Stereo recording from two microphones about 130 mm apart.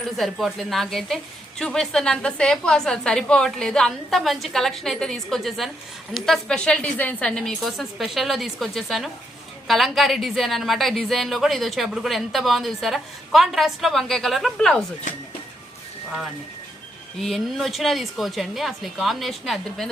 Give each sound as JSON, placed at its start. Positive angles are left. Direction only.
{"t": 0.2, "sound": "a woman's voice", "side_deg": 0}
{"t": 17.2, "sound": "a woman's voice", "side_deg": 0}